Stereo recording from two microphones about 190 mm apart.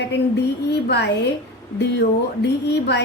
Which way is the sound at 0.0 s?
65° left (ahead or behind).